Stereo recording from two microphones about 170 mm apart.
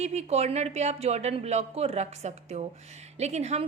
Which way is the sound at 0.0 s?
40° right (ahead or behind).